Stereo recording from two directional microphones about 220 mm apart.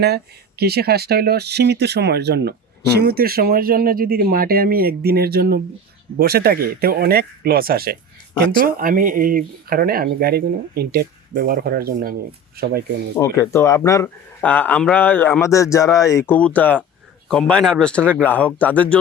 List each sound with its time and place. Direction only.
0.0 s speech: 45° right (ahead or behind)
13.1 s speech: 15° left (ahead or behind)